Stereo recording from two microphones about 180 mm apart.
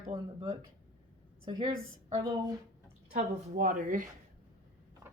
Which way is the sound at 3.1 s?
50° right (ahead or behind).